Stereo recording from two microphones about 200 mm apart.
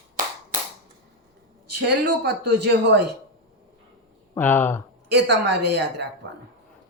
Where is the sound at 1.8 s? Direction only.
55° right (ahead or behind).